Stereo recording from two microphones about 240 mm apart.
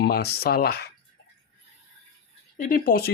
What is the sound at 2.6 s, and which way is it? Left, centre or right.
Speech, left.